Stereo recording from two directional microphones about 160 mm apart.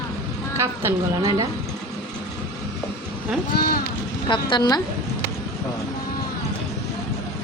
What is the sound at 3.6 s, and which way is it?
Speech, 70° left (ahead or behind).